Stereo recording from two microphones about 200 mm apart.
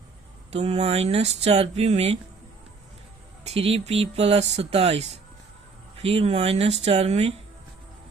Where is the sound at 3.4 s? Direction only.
30° right (ahead or behind).